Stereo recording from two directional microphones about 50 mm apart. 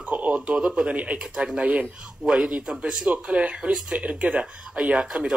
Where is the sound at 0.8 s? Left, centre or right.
Right.